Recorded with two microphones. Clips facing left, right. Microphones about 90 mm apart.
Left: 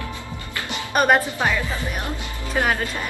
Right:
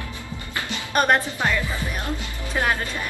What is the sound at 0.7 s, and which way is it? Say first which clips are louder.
A woman's voice: left 2 dB; 10° left (ahead or behind).